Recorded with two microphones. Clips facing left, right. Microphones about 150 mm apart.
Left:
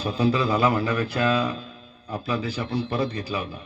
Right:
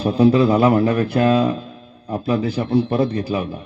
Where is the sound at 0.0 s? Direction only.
55° right (ahead or behind).